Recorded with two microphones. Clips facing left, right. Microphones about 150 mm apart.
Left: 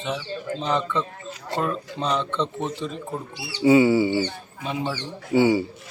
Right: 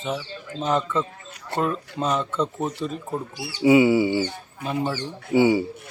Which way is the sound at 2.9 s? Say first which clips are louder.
Right 2 dB; 45° right (ahead or behind).